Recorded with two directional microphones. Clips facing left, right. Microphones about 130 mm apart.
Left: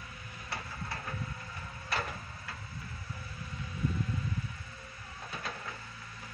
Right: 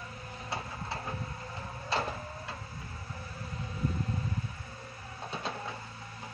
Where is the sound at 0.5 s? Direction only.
25° right (ahead or behind).